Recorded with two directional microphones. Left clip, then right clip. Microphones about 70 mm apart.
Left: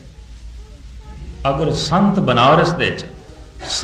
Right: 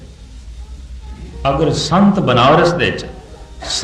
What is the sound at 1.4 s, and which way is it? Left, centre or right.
A man's voice, left.